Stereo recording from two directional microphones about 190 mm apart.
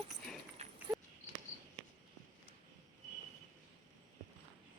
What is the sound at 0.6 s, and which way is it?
Horse, 35° right (ahead or behind).